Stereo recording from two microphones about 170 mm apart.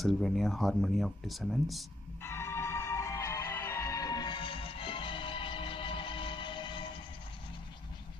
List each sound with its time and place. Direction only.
0.0 s speech: centre (ahead or behind)
2.2 s music: 15° left (ahead or behind)